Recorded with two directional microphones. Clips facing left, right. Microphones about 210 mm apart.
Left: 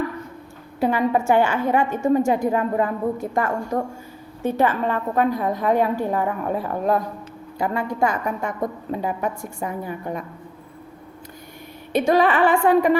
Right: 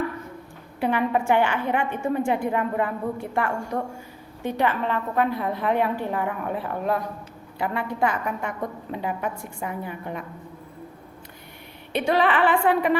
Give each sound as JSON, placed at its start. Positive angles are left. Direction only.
{"t": 0.8, "sound": "a woman's voice", "side_deg": 40}
{"t": 11.9, "sound": "a woman's voice", "side_deg": 40}